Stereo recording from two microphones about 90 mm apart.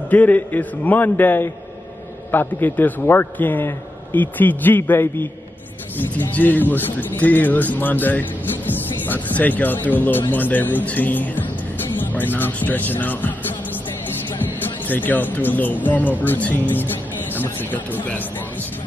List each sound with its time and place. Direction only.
0.1 s a man's voice: 15° left (ahead or behind)
14.9 s a man's voice: 20° left (ahead or behind)